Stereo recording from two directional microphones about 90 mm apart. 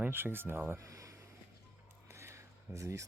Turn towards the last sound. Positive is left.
turn(degrees=-35)  # may be behind; listen again after turning